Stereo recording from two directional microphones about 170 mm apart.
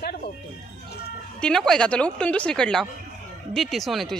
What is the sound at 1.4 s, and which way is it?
Speech, 5° left (ahead or behind).